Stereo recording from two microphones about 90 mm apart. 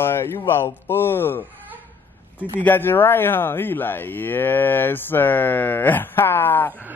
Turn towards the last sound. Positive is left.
turn(degrees=20)  # may be behind; listen again after turning